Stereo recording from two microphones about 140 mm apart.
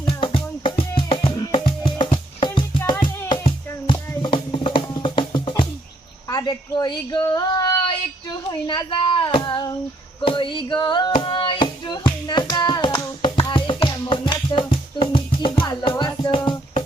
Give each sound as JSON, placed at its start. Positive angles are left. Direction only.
{"t": 0.0, "sound": "music", "side_deg": 35}
{"t": 6.2, "sound": "a sound", "side_deg": 30}
{"t": 10.2, "sound": "music", "side_deg": 35}